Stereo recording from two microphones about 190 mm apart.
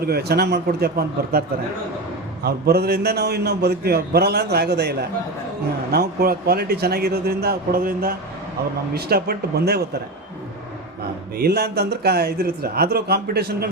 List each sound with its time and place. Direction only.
0.0 s a man's voice: 55° right (ahead or behind)
11.3 s a man's voice: 55° right (ahead or behind)